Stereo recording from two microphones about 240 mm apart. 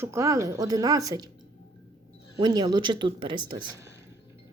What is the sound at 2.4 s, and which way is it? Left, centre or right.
Speech, centre.